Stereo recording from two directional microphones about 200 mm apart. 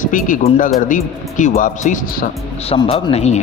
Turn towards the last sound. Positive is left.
turn(degrees=30)  # may be behind; listen again after turning